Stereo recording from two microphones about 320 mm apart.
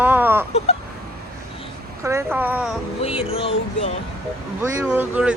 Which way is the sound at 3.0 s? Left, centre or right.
Centre.